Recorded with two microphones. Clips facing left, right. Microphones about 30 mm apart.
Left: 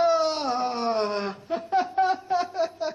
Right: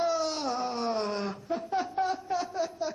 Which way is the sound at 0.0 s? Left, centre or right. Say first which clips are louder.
Left 6 dB; left.